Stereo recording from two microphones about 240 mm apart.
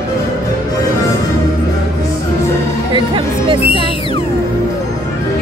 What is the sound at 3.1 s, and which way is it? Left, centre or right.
Music, centre.